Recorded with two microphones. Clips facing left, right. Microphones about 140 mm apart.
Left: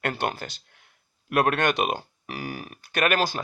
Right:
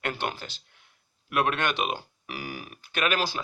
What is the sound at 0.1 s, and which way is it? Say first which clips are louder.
Speech: left 3 dB; 45° left (ahead or behind).